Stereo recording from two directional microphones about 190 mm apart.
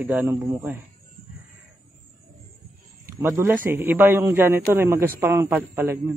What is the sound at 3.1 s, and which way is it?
A man's voice, 15° right (ahead or behind).